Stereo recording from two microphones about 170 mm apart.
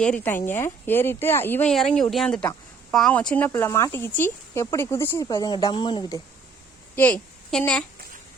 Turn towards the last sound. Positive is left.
turn(degrees=5)  # may be behind; listen again after turning